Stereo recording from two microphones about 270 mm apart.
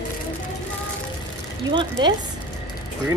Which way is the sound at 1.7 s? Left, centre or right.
Centre.